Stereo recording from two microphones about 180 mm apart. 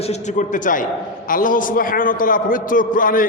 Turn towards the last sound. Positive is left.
turn(degrees=50)  # may be behind; listen again after turning